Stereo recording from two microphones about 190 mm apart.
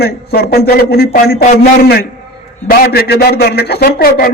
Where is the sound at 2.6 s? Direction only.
55° left (ahead or behind).